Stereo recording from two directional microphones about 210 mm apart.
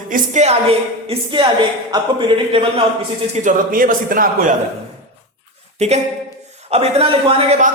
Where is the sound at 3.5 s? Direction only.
40° right (ahead or behind).